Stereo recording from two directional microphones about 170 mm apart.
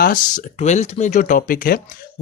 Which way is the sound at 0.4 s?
40° left (ahead or behind).